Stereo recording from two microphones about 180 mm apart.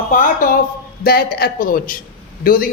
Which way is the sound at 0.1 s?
45° left (ahead or behind).